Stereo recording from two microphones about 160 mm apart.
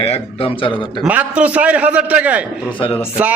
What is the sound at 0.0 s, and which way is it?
Speech, 35° left (ahead or behind).